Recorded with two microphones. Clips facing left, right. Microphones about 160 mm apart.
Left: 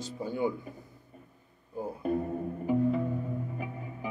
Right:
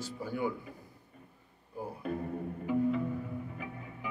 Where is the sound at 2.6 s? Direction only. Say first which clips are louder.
Left 3 dB; 35° left (ahead or behind).